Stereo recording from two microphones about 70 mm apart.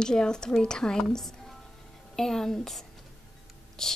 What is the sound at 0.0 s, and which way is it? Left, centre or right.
A woman's voice, centre.